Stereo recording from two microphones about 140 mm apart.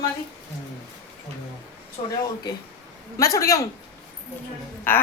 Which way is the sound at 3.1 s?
25° left (ahead or behind).